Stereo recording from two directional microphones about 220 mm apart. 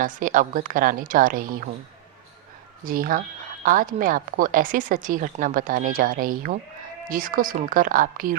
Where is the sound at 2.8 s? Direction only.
40° right (ahead or behind).